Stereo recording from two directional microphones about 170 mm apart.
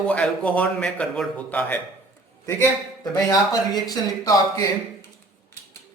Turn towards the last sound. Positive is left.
turn(degrees=20)  # may be behind; listen again after turning